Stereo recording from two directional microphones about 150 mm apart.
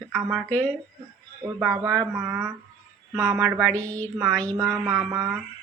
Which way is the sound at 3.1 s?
20° right (ahead or behind).